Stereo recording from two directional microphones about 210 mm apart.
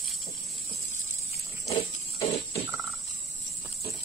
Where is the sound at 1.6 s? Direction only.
30° left (ahead or behind).